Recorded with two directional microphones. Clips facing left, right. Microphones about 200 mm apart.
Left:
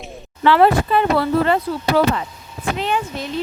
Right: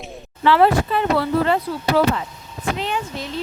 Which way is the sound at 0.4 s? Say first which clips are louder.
Left 1 dB; 55° left (ahead or behind).